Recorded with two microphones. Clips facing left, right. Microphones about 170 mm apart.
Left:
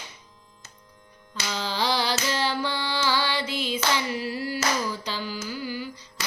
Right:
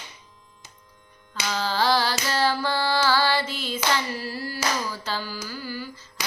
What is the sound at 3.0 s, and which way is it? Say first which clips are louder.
Music: right 2 dB; 15° left (ahead or behind).